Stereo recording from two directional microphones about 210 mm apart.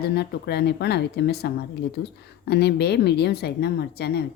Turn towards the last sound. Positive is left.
turn(degrees=50)  # may be behind; listen again after turning